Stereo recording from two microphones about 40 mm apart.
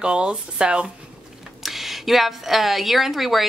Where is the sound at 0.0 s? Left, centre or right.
Right.